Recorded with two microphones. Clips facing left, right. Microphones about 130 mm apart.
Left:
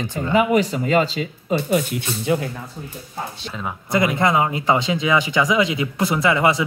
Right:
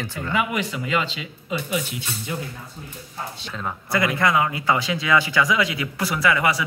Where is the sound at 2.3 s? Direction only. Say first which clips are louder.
Left 11 dB; 90° left.